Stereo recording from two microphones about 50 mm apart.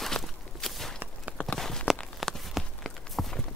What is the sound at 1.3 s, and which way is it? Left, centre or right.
Walk, left.